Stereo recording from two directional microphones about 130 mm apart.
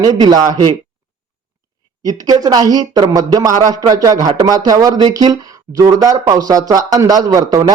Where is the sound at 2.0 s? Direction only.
30° right (ahead or behind).